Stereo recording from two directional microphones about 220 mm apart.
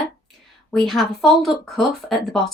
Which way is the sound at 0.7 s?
Centre (ahead or behind).